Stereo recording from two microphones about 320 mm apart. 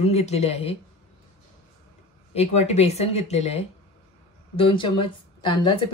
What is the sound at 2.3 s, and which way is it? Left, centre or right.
Speech, centre.